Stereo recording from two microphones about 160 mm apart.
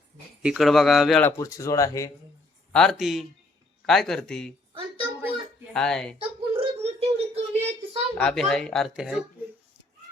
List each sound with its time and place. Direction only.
0.4 s speech: 5° right (ahead or behind)
1.2 s speech: 20° left (ahead or behind)
2.7 s speech: centre (ahead or behind)
4.7 s a sound: 30° right (ahead or behind)
5.7 s speech: 5° left (ahead or behind)
6.1 s a sound: 35° right (ahead or behind)
8.2 s speech: 5° left (ahead or behind)